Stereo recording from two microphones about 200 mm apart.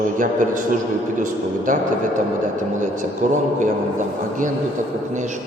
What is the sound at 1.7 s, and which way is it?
Speech, 40° right (ahead or behind).